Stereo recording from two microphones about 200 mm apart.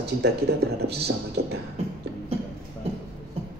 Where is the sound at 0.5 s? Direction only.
55° right (ahead or behind).